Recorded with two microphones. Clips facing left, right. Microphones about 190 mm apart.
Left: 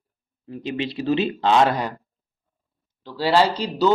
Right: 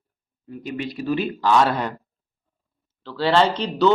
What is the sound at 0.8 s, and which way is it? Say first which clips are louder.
Speech: left 2 dB; 25° left (ahead or behind).